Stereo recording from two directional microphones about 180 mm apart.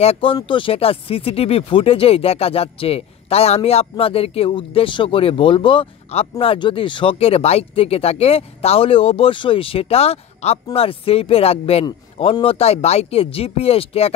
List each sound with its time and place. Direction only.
0.0 s speech: 30° left (ahead or behind)